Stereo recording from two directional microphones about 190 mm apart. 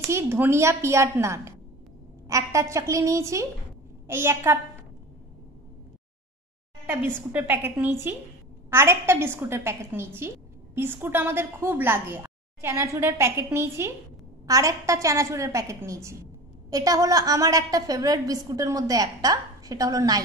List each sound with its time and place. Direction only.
0.1 s a woman's voice: 10° right (ahead or behind)
7.2 s a woman's voice: 10° right (ahead or behind)